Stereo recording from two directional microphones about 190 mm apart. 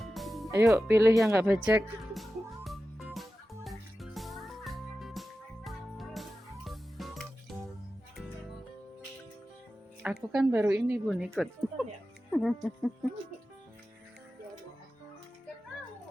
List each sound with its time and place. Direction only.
0.0 s music: centre (ahead or behind)
0.5 s speech: 15° right (ahead or behind)
2.1 s music: centre (ahead or behind)
10.0 s speech: 5° right (ahead or behind)
11.2 s a sound: 5° right (ahead or behind)